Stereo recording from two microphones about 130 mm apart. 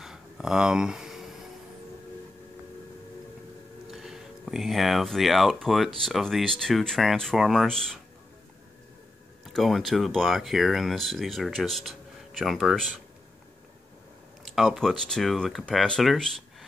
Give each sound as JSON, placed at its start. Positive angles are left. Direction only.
{"t": 0.0, "sound": "a sound", "side_deg": -5}
{"t": 3.9, "sound": "speech", "side_deg": -5}
{"t": 9.4, "sound": "speech", "side_deg": 0}
{"t": 14.4, "sound": "speech", "side_deg": -5}